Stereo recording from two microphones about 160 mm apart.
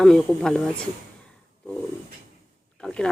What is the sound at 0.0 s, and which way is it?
Speech, 5° left (ahead or behind).